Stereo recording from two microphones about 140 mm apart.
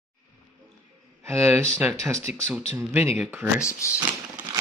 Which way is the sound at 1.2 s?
20° right (ahead or behind).